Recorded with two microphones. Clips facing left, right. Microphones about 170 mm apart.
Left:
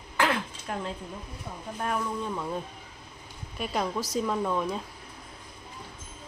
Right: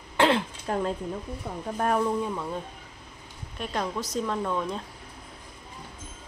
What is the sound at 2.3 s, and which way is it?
Speech, centre (ahead or behind).